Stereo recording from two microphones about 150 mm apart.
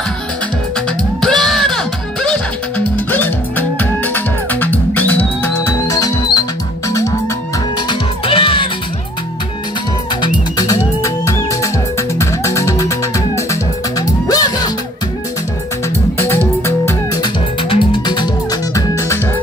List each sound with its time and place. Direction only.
1.2 s music: centre (ahead or behind); by 7.2 s 20° left (ahead or behind)
7.9 s music: 35° left (ahead or behind)
11.0 s music: 20° left (ahead or behind)
16.2 s music: 15° left (ahead or behind)
17.2 s music: 35° left (ahead or behind)